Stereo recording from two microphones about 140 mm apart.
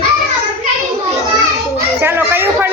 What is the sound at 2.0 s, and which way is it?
Children playing, 15° right (ahead or behind).